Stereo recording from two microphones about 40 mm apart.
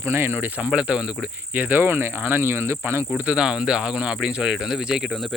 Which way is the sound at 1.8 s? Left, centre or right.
Right.